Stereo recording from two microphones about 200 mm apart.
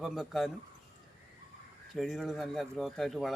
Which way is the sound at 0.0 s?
Centre (ahead or behind).